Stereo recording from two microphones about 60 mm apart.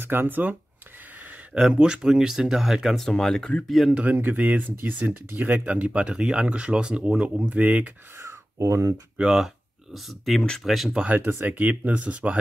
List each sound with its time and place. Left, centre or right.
0.0 s speech: right
1.5 s speech: centre
3.0 s speech: centre
3.9 s speech: right
4.2 s speech: right; by 7.3 s centre
7.4 s speech: right
8.2 s a sound: right
9.2 s speech: centre
11.1 s speech: right